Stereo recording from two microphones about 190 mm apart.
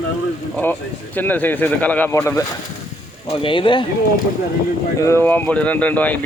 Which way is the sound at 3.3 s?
25° left (ahead or behind).